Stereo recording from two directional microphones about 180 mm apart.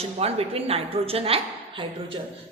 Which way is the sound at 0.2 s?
35° right (ahead or behind).